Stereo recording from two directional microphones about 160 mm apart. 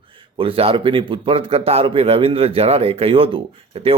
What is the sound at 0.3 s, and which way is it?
Speech, 35° right (ahead or behind).